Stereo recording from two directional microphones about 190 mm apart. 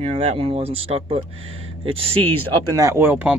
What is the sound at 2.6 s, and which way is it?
Speech, 20° right (ahead or behind).